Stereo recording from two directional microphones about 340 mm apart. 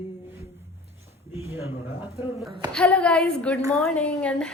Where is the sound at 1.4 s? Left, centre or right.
Centre.